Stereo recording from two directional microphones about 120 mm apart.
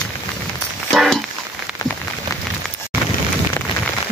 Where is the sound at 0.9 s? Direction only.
5° left (ahead or behind).